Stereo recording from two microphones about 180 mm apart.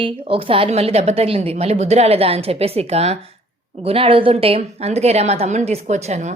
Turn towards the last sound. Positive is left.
turn(degrees=-35)  # may be behind; listen again after turning